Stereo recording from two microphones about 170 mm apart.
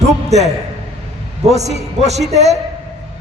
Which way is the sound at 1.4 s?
40° right (ahead or behind).